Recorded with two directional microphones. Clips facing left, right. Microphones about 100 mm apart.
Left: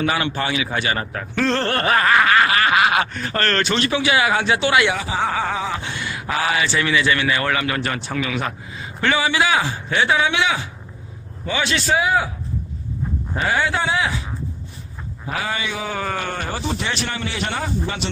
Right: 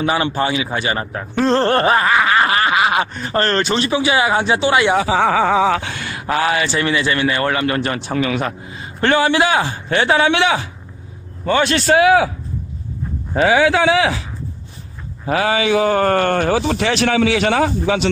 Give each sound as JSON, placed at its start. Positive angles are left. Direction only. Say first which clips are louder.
{"t": 0.0, "sound": "speech", "louder": "right 4 dB", "side_deg": -30}
{"t": 4.9, "sound": "speech", "louder": "right 7 dB", "side_deg": -90}
{"t": 11.4, "sound": "speech", "louder": "right 6 dB", "side_deg": -50}
{"t": 13.3, "sound": "a man's voice", "louder": "right 8 dB", "side_deg": -90}
{"t": 15.3, "sound": "a man's voice", "louder": "right 10 dB", "side_deg": -75}